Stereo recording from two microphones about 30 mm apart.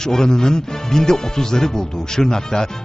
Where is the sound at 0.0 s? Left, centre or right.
Centre.